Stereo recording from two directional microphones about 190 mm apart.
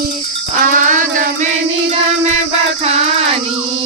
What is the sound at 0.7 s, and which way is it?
Music, 45° right (ahead or behind).